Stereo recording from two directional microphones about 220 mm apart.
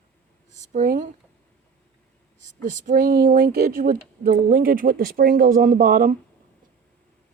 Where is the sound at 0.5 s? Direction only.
35° right (ahead or behind).